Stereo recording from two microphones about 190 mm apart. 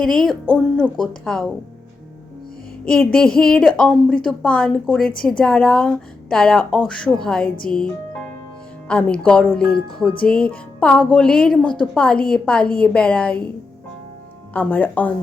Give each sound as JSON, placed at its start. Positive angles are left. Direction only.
{"t": 0.0, "sound": "a woman's voice", "side_deg": 5}
{"t": 2.9, "sound": "a woman's voice", "side_deg": 5}
{"t": 7.4, "sound": "speech", "side_deg": 50}
{"t": 8.9, "sound": "a woman's voice", "side_deg": 5}
{"t": 10.4, "sound": "music", "side_deg": 5}
{"t": 11.1, "sound": "a woman's voice", "side_deg": 5}
{"t": 14.5, "sound": "a woman's voice", "side_deg": 10}